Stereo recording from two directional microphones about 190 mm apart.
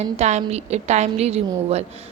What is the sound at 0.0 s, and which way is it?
Speech, 35° right (ahead or behind).